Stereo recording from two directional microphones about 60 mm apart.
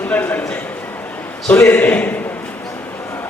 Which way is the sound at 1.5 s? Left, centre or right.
Left.